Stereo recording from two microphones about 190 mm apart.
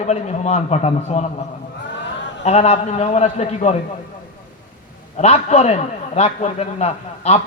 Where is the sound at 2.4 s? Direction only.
35° left (ahead or behind).